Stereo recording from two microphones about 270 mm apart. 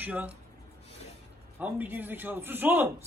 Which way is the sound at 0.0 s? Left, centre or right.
Centre.